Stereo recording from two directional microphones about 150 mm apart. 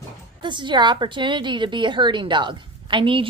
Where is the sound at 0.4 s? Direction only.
30° right (ahead or behind).